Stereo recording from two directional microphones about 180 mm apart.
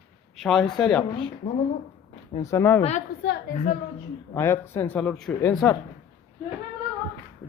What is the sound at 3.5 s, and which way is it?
Speech, 50° left (ahead or behind).